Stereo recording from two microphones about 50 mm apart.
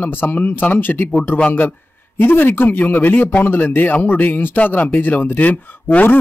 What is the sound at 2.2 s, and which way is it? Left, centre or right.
Speech, left.